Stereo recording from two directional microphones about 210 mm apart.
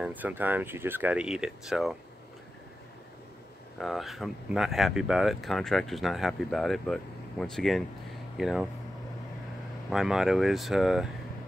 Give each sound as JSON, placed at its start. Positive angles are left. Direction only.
{"t": 0.0, "sound": "speech", "side_deg": -10}
{"t": 3.8, "sound": "speech", "side_deg": 0}
{"t": 9.8, "sound": "speech", "side_deg": 0}